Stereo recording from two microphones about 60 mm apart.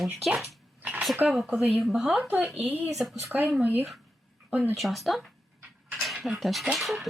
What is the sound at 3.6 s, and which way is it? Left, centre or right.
Speech, right.